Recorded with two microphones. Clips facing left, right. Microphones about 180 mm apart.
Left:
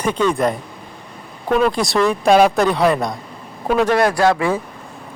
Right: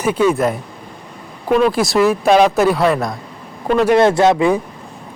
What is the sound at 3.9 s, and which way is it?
Speech, 25° right (ahead or behind).